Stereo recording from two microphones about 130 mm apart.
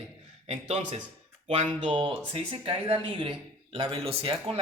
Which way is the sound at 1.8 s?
45° right (ahead or behind).